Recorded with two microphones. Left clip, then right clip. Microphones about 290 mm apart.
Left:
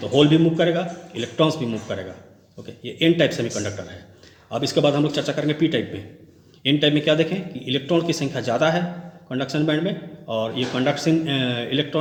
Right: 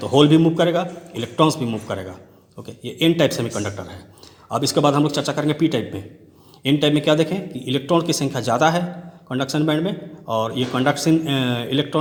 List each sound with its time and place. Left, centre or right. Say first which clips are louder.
0.0 s speech: right 2 dB; right